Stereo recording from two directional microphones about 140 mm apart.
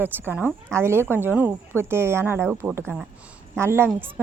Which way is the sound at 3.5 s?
15° right (ahead or behind).